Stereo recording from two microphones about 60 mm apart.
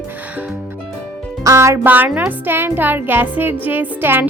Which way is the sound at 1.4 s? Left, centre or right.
Right.